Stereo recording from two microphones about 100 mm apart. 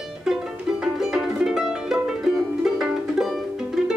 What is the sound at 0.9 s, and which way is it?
Music, 5° right (ahead or behind).